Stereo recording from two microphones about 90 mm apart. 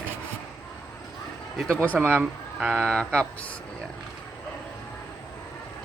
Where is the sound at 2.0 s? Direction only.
20° right (ahead or behind).